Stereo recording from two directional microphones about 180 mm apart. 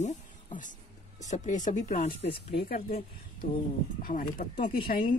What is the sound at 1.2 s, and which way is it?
Speech, 40° left (ahead or behind).